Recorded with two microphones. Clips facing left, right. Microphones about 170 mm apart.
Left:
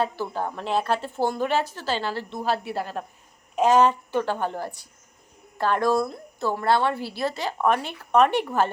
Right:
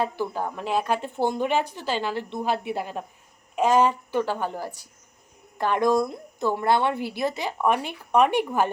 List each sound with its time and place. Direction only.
0.0 s a woman's voice: 10° right (ahead or behind)